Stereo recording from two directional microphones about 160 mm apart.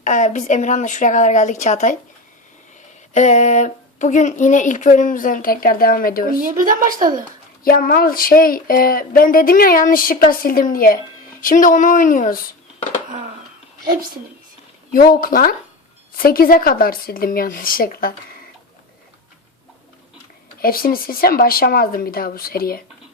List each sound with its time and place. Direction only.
0.0 s a woman's voice: 50° left (ahead or behind)
3.1 s a woman's voice: 45° left (ahead or behind); by 6.3 s 65° left (ahead or behind)
6.4 s speech: 60° right (ahead or behind)
7.6 s speech: 65° left (ahead or behind)
14.9 s speech: 65° left (ahead or behind)
20.6 s speech: 65° left (ahead or behind)